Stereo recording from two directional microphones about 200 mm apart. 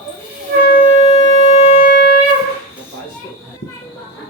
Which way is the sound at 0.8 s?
30° left (ahead or behind).